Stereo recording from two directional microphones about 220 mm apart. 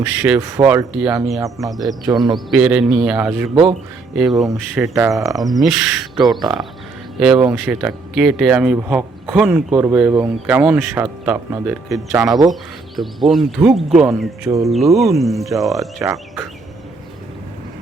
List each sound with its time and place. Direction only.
0.0 s speech: 5° right (ahead or behind)
2.0 s speech: 20° right (ahead or behind)
2.3 s speech: 5° right (ahead or behind)
3.5 s speech: 25° right (ahead or behind)
4.1 s speech: centre (ahead or behind)
13.0 s speech: centre (ahead or behind)